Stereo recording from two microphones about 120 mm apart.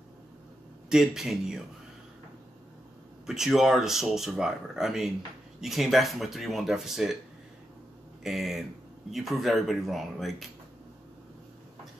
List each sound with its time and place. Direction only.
0.8 s speech: 5° right (ahead or behind)
3.3 s speech: 5° right (ahead or behind)
8.2 s speech: centre (ahead or behind)